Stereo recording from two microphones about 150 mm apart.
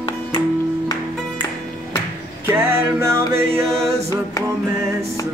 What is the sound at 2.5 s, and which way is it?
Music, 15° right (ahead or behind).